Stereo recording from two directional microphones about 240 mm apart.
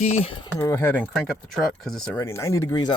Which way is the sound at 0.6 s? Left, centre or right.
Centre.